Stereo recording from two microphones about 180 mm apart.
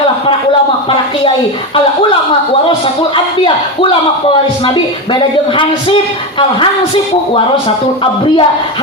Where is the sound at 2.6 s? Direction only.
30° left (ahead or behind).